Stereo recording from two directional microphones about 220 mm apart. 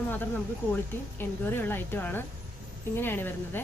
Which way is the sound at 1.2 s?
10° left (ahead or behind).